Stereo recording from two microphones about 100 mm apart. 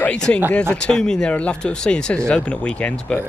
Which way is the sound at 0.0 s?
10° left (ahead or behind).